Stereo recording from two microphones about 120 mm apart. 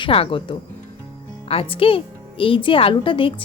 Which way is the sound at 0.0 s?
50° left (ahead or behind).